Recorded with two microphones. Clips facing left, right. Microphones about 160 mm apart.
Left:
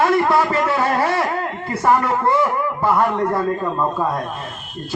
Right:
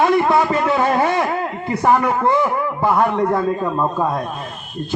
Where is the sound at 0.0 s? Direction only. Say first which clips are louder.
Right 1 dB; 20° right (ahead or behind).